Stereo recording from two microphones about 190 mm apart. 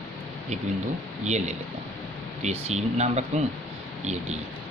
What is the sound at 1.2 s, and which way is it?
Speech, 35° right (ahead or behind).